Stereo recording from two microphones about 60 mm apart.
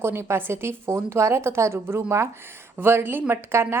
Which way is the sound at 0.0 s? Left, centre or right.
Right.